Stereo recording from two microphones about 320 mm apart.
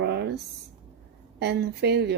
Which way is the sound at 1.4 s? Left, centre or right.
Right.